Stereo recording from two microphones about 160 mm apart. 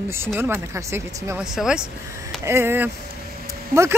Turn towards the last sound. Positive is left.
turn(degrees=-15)  # may be behind; listen again after turning